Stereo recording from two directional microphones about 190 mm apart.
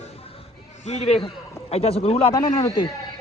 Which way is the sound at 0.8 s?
35° left (ahead or behind).